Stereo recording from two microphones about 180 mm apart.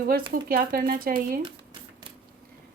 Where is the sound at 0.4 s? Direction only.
50° right (ahead or behind).